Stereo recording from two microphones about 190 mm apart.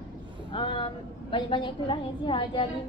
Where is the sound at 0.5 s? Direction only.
25° left (ahead or behind).